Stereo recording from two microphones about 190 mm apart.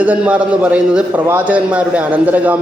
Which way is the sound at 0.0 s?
10° right (ahead or behind).